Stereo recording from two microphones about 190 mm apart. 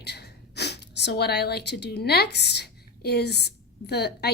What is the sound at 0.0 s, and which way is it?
A woman's voice, 60° left (ahead or behind).